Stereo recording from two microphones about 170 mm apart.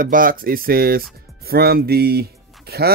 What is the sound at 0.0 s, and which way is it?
Speech, 55° right (ahead or behind).